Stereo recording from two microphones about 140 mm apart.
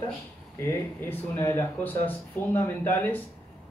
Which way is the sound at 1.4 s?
15° left (ahead or behind).